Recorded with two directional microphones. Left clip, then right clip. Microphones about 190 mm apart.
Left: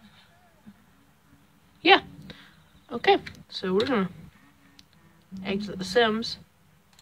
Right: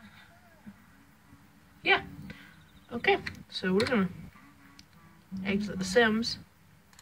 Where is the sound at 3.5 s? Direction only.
10° left (ahead or behind).